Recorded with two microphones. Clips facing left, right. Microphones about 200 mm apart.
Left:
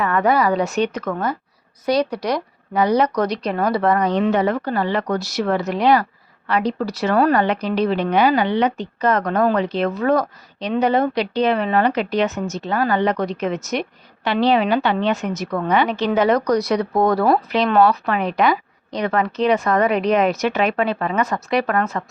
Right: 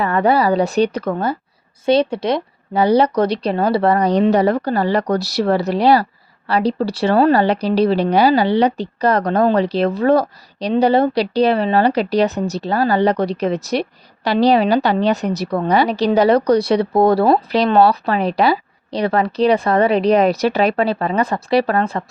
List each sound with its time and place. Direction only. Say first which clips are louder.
0.0 s a woman's voice: right 2 dB; 30° right (ahead or behind)